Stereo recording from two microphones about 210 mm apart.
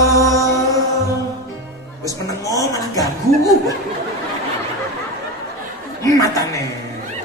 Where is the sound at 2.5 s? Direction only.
15° left (ahead or behind).